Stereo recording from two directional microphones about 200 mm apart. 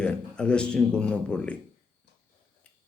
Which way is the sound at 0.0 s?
5° left (ahead or behind).